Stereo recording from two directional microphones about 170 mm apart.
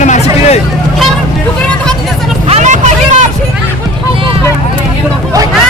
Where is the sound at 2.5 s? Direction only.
45° right (ahead or behind).